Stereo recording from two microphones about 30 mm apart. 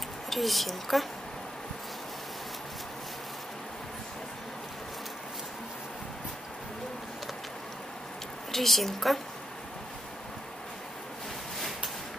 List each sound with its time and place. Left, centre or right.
0.3 s a woman's voice: centre
8.5 s a woman's voice: centre